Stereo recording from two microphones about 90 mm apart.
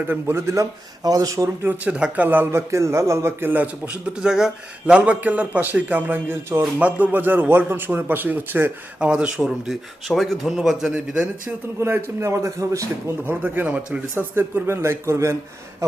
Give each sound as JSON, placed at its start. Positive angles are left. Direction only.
{"t": 0.1, "sound": "speech", "side_deg": -30}
{"t": 1.6, "sound": "speech", "side_deg": -20}
{"t": 9.0, "sound": "speech", "side_deg": -10}
{"t": 10.9, "sound": "speech", "side_deg": -15}
{"t": 13.2, "sound": "speech", "side_deg": -20}